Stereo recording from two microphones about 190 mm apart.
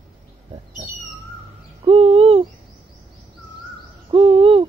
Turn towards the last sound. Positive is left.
turn(degrees=-30)  # may be behind; listen again after turning